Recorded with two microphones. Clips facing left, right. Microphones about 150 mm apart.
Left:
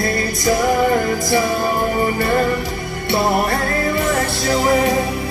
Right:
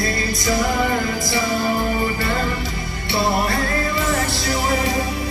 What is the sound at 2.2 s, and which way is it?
Music, 50° left (ahead or behind).